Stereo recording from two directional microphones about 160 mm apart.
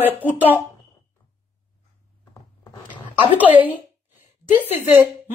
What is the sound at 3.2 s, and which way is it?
Speech, 10° right (ahead or behind).